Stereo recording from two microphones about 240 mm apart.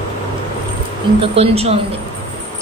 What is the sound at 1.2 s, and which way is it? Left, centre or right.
Speech, right.